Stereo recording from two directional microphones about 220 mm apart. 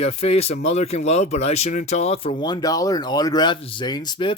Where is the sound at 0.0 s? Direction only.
30° left (ahead or behind).